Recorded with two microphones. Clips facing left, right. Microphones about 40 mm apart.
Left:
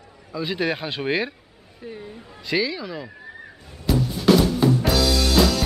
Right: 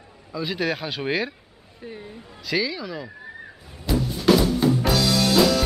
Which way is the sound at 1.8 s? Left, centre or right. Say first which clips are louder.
Left 1 dB; centre.